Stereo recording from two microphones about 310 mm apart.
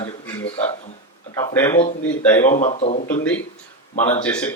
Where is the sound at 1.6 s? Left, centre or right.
Centre.